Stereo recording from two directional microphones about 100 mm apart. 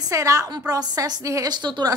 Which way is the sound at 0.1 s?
35° right (ahead or behind).